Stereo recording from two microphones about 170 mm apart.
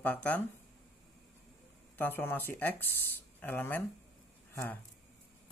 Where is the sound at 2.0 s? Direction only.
10° left (ahead or behind).